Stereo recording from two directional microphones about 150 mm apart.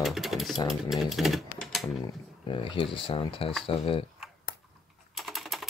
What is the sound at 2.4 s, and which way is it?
Speech, 35° left (ahead or behind).